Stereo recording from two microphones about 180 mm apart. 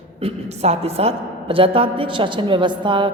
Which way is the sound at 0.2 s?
35° right (ahead or behind).